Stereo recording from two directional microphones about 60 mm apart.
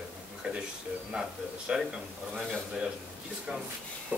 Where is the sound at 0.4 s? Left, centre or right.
Centre.